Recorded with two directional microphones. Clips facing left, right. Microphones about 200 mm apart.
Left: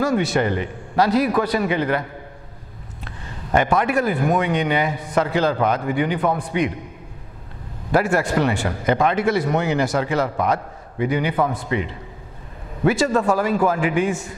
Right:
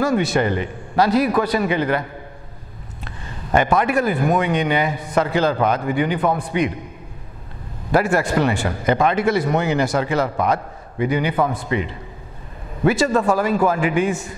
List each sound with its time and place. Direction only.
0.0 s a man's voice: 10° right (ahead or behind)
3.5 s a man's voice: 15° right (ahead or behind)
7.9 s a man's voice: 10° right (ahead or behind)